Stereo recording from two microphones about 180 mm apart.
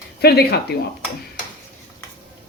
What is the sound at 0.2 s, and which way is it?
Speech, 65° left (ahead or behind).